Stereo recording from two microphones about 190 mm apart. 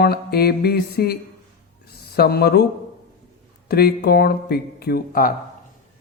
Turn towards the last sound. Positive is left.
turn(degrees=50)  # may be behind; listen again after turning